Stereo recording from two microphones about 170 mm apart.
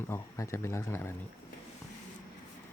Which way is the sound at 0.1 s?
15° left (ahead or behind).